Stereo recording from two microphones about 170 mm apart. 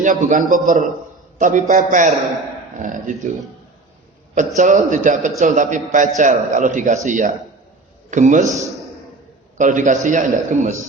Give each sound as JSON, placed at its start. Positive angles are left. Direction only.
{"t": 0.0, "sound": "a man's voice", "side_deg": -50}
{"t": 4.5, "sound": "a man's voice", "side_deg": -50}
{"t": 9.6, "sound": "a man's voice", "side_deg": -50}